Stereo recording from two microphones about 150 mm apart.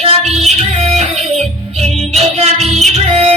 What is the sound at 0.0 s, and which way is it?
Music, 45° right (ahead or behind).